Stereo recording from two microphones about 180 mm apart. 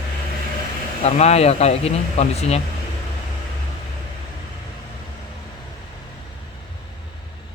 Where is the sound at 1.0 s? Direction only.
35° left (ahead or behind).